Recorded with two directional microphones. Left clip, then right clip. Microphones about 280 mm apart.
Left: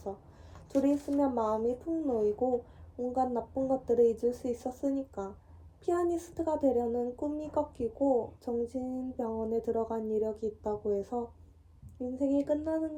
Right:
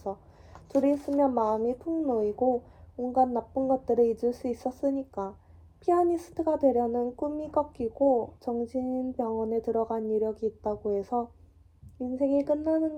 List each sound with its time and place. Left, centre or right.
0.0 s speech: right